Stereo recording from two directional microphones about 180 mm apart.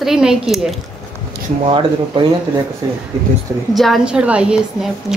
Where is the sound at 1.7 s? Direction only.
30° right (ahead or behind).